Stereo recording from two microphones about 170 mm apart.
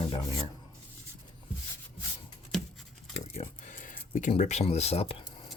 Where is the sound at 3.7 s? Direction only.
50° left (ahead or behind).